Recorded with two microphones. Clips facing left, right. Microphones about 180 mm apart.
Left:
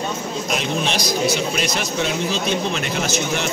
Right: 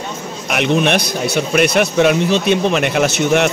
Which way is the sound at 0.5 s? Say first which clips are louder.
Right 9 dB; 65° right (ahead or behind).